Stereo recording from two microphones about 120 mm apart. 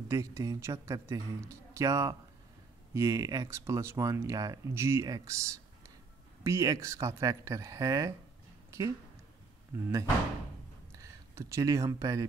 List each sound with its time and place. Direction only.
0.1 s speech: 25° right (ahead or behind)
8.6 s a sound: 25° right (ahead or behind)
10.9 s speech: 25° right (ahead or behind)